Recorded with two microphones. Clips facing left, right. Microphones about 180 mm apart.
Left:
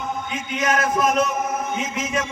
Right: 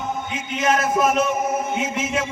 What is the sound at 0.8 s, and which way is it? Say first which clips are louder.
Speech: right 1 dB; 5° right (ahead or behind).